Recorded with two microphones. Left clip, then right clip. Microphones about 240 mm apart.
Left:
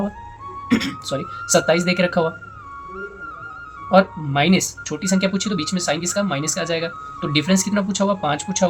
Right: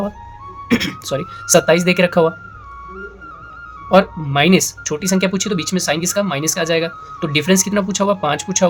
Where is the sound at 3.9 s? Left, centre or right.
Right.